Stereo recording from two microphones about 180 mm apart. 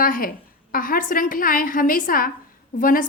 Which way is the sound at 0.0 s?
50° left (ahead or behind).